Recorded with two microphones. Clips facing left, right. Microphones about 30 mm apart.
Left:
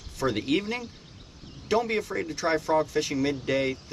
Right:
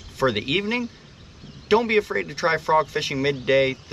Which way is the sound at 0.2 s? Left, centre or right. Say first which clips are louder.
Right 4 dB; right.